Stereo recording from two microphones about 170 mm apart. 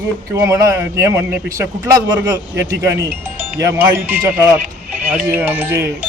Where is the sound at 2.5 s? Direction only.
85° right.